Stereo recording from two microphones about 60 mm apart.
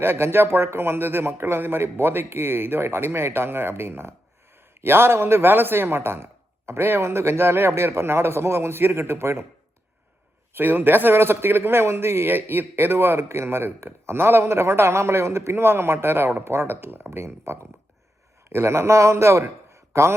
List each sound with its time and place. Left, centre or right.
0.0 s a man's voice: right
10.5 s a man's voice: right